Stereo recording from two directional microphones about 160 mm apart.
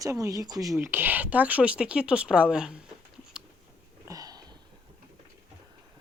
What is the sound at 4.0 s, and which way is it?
Sniff, 20° right (ahead or behind).